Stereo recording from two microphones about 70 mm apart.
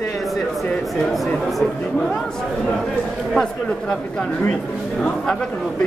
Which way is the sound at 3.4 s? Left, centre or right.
Centre.